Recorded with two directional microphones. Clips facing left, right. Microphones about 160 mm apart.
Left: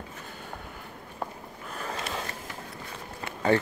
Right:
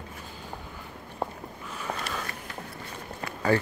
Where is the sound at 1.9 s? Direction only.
30° left (ahead or behind).